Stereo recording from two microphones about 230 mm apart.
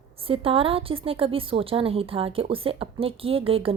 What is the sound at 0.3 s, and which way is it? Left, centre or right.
A woman's voice, right.